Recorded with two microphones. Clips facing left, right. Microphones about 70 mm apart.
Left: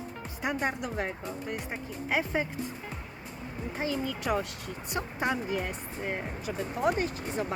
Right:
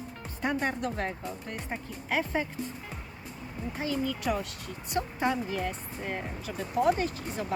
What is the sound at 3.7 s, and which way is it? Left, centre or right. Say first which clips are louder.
Speech: right 1 dB; left.